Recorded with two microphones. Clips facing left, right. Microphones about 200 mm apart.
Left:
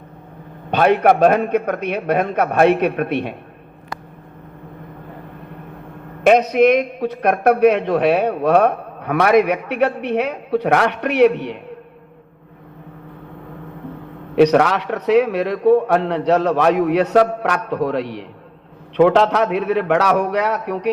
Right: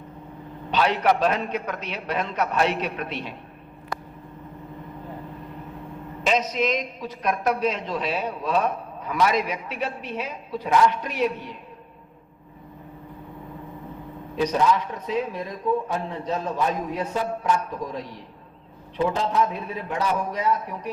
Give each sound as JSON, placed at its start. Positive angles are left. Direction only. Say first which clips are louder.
{"t": 0.7, "sound": "a man's voice", "louder": "left 7 dB", "side_deg": 55}
{"t": 6.2, "sound": "a man's voice", "louder": "left 11 dB", "side_deg": 60}
{"t": 14.3, "sound": "a man's voice", "louder": "left 8 dB", "side_deg": 70}